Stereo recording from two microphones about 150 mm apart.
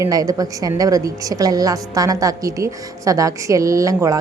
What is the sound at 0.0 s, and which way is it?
A woman's voice, 25° right (ahead or behind).